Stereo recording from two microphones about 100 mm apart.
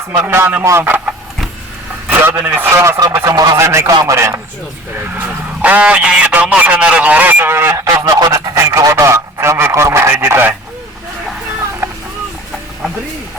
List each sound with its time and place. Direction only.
0.3 s a man's voice: 20° right (ahead or behind)
0.9 s speech: 15° right (ahead or behind)
2.2 s a man's voice: 20° right (ahead or behind)
3.3 s a man's voice: 40° right (ahead or behind)
3.6 s a man's voice: 25° right (ahead or behind)
5.1 s speech: 15° right (ahead or behind)
11.8 s a sound: 25° right (ahead or behind)